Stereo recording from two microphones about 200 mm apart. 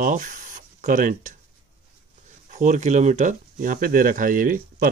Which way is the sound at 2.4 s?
40° right (ahead or behind).